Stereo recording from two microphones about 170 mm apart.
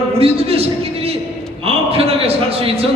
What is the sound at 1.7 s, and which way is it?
Speech, 35° right (ahead or behind).